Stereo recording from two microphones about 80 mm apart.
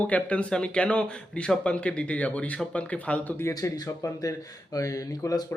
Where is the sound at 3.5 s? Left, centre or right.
Left.